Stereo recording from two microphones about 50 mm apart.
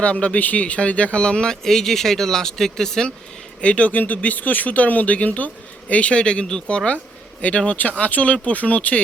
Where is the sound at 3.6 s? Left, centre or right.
Left.